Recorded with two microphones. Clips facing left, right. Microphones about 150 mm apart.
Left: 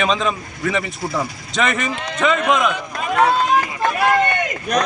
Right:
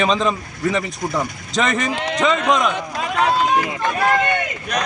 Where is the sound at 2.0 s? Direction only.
85° right.